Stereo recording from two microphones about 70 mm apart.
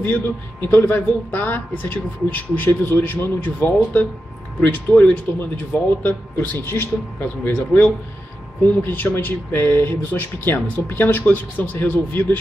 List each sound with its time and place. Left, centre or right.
0.0 s speech: left